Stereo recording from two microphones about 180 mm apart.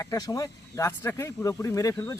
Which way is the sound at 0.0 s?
20° left (ahead or behind).